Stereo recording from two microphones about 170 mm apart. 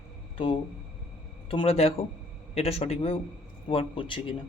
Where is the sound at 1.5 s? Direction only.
35° left (ahead or behind).